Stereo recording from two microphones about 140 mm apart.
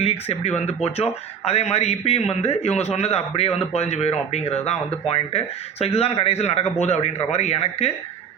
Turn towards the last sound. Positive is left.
turn(degrees=50)  # may be behind; listen again after turning